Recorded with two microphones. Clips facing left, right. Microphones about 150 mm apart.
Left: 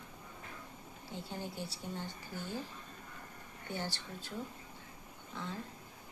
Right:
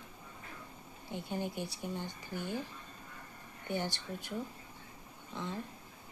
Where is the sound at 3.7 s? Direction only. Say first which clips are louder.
Right 4 dB; 15° right (ahead or behind).